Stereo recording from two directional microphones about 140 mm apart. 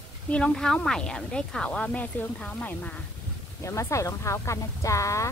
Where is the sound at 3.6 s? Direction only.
20° left (ahead or behind).